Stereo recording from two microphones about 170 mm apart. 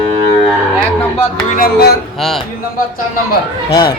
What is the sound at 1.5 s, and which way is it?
Music, 60° left (ahead or behind).